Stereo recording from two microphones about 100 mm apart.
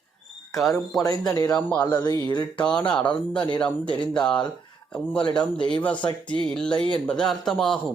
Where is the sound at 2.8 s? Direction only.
10° left (ahead or behind).